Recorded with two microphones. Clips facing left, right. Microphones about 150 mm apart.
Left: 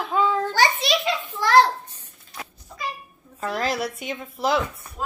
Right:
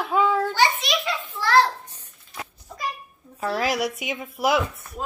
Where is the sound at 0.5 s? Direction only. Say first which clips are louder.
Left 1 dB; 35° left (ahead or behind).